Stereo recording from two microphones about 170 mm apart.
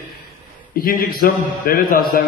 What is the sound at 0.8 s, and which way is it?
A man's voice, 55° left (ahead or behind).